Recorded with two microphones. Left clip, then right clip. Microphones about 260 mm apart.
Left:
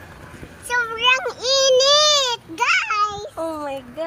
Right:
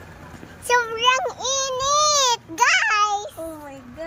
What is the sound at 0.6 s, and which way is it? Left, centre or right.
Child singing, centre.